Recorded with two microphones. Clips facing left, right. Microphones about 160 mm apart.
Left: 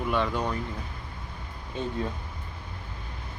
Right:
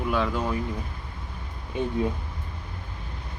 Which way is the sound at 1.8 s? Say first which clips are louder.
Right 4 dB; 15° right (ahead or behind).